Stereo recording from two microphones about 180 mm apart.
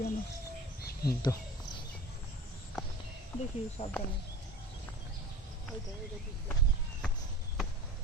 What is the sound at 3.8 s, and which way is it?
Speech, 35° left (ahead or behind).